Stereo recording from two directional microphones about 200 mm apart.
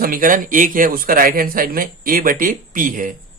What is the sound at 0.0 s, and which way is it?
A man's voice, 45° right (ahead or behind).